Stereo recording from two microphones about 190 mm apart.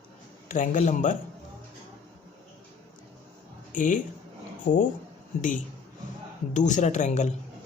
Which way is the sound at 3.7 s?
40° left (ahead or behind).